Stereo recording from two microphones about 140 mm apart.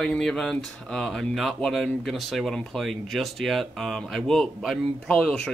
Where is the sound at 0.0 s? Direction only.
5° left (ahead or behind).